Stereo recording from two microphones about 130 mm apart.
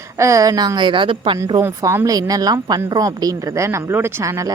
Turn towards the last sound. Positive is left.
turn(degrees=-25)  # may be behind; listen again after turning